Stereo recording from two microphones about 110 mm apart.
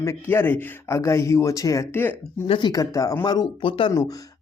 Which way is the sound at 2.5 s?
45° left (ahead or behind).